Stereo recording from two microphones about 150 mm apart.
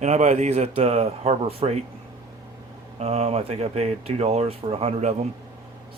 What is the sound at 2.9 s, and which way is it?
Speech, 45° right (ahead or behind).